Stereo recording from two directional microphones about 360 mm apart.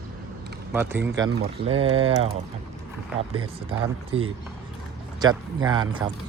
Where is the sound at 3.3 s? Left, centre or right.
Centre.